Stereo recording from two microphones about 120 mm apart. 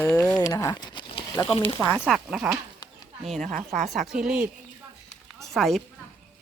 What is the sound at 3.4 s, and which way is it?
Speech, 90° right.